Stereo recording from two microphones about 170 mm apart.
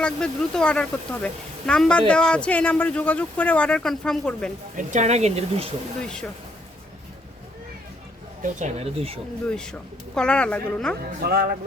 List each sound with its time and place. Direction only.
0.0 s speech: 5° left (ahead or behind)
4.7 s speech: 50° right (ahead or behind)
6.0 s a woman's voice: 5° left (ahead or behind)
8.4 s speech: 45° right (ahead or behind)
10.2 s a woman's voice: 5° left (ahead or behind)
11.2 s speech: 65° right (ahead or behind)